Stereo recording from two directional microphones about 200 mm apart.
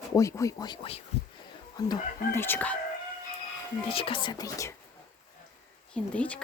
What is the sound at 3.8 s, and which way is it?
Speech, 25° left (ahead or behind).